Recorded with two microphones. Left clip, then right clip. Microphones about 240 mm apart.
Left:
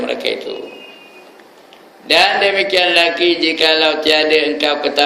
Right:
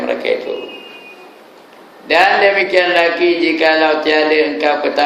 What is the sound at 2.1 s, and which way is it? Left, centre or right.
A man's voice, left.